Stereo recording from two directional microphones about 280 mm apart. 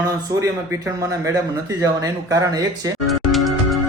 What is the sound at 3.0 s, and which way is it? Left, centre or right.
Music, centre.